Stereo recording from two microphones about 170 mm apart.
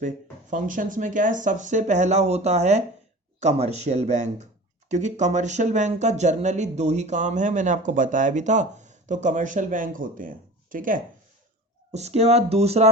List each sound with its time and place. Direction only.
0.5 s speech: 50° right (ahead or behind)
11.9 s speech: 40° right (ahead or behind)